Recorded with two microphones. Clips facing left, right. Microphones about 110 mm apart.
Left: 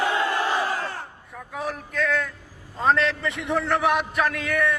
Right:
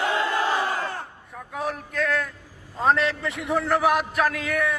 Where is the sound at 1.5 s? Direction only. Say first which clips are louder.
Even; centre (ahead or behind).